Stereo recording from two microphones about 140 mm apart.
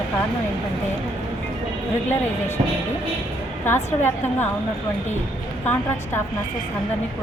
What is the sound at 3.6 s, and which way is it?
Speech, 15° left (ahead or behind).